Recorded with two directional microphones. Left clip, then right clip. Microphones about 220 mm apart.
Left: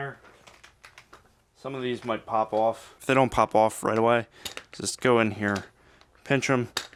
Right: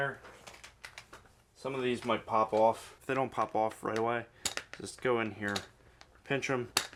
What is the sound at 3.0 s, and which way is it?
Speech, 50° left (ahead or behind).